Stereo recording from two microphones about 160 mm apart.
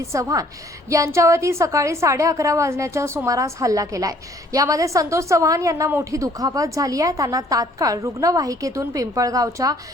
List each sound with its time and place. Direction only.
0.1 s a woman's voice: 20° right (ahead or behind)